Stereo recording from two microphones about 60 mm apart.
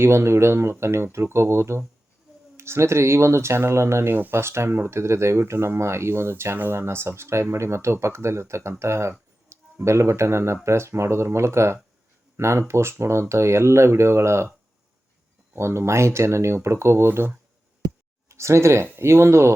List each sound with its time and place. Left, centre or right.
0.0 s speech: right
15.5 s speech: right
18.3 s speech: right